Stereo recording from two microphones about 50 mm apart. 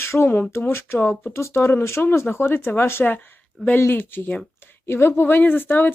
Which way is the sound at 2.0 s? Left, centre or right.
Left.